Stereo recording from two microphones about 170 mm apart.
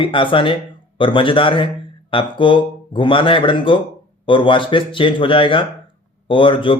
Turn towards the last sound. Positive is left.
turn(degrees=30)  # may be behind; listen again after turning